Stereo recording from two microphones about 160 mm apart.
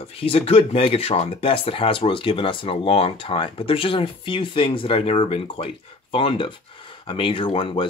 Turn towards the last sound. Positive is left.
turn(degrees=35)  # may be behind; listen again after turning